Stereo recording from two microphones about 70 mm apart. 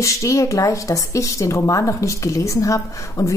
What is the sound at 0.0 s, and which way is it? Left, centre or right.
Speech, left.